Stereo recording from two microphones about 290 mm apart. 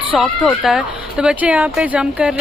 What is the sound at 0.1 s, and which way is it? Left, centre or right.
Speech, centre.